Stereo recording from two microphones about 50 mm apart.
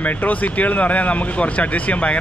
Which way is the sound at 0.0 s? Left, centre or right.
Left.